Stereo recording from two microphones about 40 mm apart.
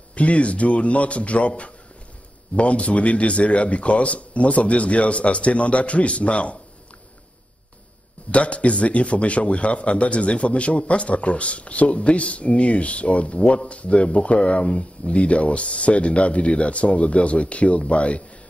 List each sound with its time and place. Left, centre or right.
0.1 s a man's voice: left
8.3 s a man's voice: left